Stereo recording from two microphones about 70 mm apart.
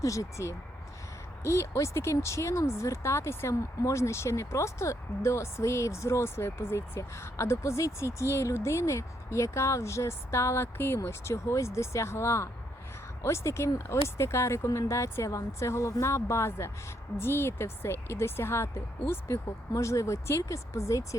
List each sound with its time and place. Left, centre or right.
0.0 s speech: left